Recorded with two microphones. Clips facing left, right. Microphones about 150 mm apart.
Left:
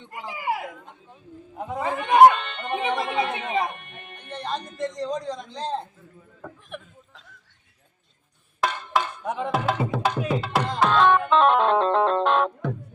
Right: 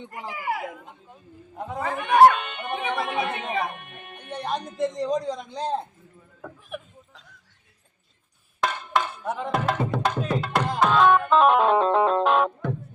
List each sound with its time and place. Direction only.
0.3 s a sound: 15° left (ahead or behind)
0.9 s a man's voice: 5° right (ahead or behind)
1.8 s speech: 20° left (ahead or behind)
2.4 s music: 10° right (ahead or behind)
3.0 s speech: 20° left (ahead or behind)
3.8 s music: 10° right (ahead or behind)
4.9 s a man's voice: 10° right (ahead or behind)
6.4 s a sound: 5° right (ahead or behind)
8.6 s music: centre (ahead or behind)